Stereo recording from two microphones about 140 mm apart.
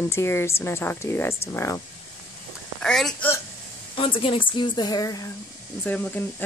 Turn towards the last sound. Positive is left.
turn(degrees=10)  # may be behind; listen again after turning